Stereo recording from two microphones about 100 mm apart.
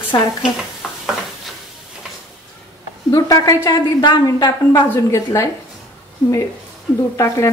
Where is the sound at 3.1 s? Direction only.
35° left (ahead or behind).